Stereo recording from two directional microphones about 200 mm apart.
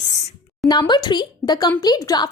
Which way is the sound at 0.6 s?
20° left (ahead or behind).